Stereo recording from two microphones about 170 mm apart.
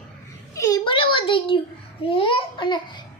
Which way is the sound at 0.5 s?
20° left (ahead or behind).